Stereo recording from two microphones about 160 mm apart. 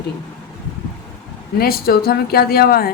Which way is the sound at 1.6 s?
70° left (ahead or behind).